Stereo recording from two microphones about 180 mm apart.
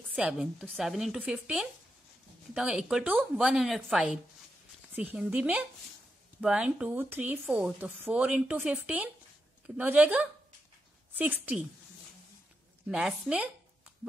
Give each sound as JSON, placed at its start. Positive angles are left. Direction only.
{"t": 0.1, "sound": "a woman's voice", "side_deg": -5}
{"t": 12.8, "sound": "a woman's voice", "side_deg": -5}